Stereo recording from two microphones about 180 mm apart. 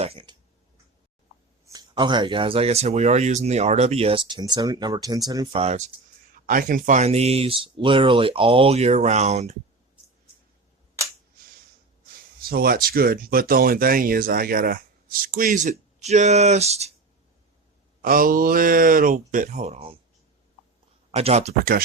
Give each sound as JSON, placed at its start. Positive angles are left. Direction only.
{"t": 0.0, "sound": "a sound", "side_deg": -30}
{"t": 1.6, "sound": "speech", "side_deg": -20}
{"t": 5.5, "sound": "speech", "side_deg": -40}
{"t": 6.4, "sound": "speech", "side_deg": -50}
{"t": 12.4, "sound": "speech", "side_deg": -55}
{"t": 18.0, "sound": "speech", "side_deg": -50}
{"t": 21.1, "sound": "speech", "side_deg": -35}